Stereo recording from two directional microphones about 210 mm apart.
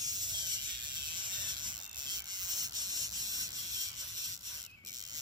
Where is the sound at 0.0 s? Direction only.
20° right (ahead or behind).